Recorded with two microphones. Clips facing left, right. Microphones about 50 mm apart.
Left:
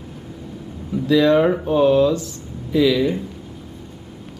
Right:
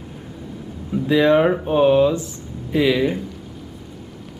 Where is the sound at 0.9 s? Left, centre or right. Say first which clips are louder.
Even; right.